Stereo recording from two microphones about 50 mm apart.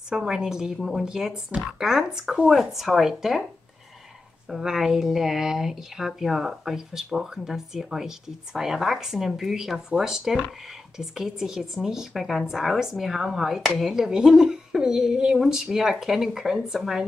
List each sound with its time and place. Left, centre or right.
0.1 s speech: centre
4.5 s speech: centre